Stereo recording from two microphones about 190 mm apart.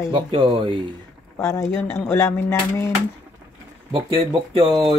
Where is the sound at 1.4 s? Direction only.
15° left (ahead or behind).